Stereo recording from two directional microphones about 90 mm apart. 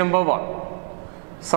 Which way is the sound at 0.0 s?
15° right (ahead or behind).